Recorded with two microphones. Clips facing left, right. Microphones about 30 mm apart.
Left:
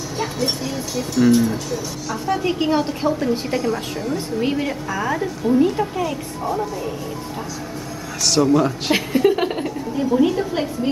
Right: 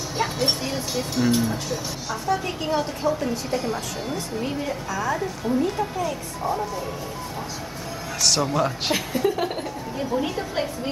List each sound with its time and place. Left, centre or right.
0.2 s speech: centre
1.2 s a woman's voice: centre
2.2 s a woman's voice: left
3.6 s a woman's voice: centre
4.4 s a woman's voice: left
6.0 s a woman's voice: centre
8.3 s a woman's voice: centre
8.9 s a woman's voice: left
9.9 s a woman's voice: centre